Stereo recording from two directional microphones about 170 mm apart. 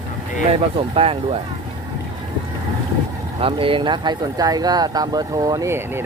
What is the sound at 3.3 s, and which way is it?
Speech, 30° right (ahead or behind).